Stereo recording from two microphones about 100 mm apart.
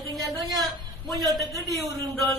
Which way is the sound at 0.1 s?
Centre (ahead or behind).